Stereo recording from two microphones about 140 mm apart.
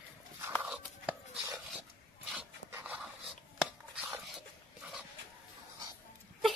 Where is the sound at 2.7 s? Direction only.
10° right (ahead or behind).